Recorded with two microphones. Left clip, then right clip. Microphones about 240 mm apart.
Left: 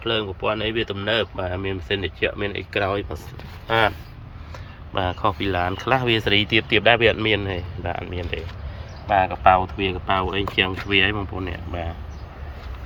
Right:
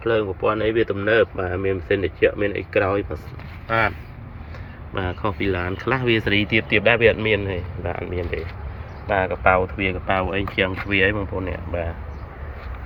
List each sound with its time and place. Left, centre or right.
0.0 s speech: centre
4.9 s speech: centre